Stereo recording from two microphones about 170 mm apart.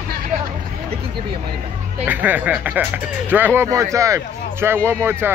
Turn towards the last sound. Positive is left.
turn(degrees=-15)  # may be behind; listen again after turning